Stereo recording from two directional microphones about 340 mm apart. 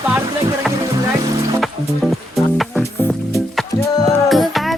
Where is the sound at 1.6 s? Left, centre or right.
Centre.